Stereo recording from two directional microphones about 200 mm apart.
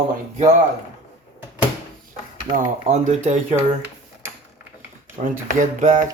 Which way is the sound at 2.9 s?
35° right (ahead or behind).